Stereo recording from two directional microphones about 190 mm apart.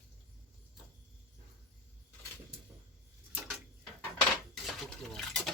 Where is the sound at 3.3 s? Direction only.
5° right (ahead or behind).